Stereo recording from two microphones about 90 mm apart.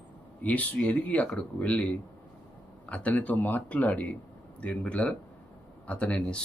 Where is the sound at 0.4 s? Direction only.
15° left (ahead or behind).